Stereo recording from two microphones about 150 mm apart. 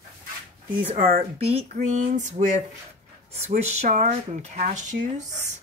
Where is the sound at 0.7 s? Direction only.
40° right (ahead or behind); by 5.4 s 55° right (ahead or behind).